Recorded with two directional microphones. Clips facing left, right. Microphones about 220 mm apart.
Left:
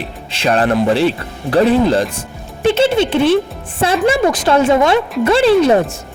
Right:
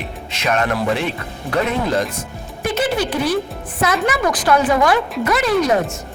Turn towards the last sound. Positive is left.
turn(degrees=30)  # may be behind; listen again after turning